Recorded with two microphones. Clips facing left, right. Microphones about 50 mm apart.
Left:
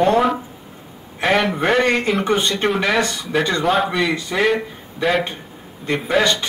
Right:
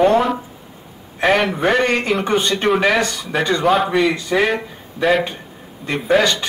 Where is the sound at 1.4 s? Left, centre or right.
Centre.